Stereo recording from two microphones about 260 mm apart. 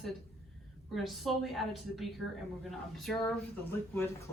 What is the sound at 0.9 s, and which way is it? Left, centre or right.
A woman's voice, centre.